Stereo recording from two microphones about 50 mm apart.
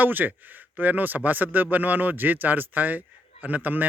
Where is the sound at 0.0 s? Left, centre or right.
Right.